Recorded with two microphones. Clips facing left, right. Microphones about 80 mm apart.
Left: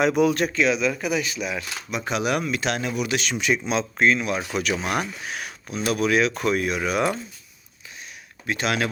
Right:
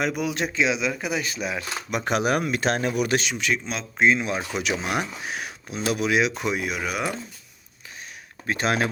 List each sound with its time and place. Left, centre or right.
0.0 s speech: centre
0.3 s speech: right
1.9 s speech: right
3.3 s a man's voice: centre
3.9 s speech: centre
8.4 s speech: right